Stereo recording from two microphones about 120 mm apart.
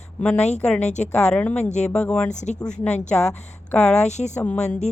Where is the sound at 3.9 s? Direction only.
70° left (ahead or behind).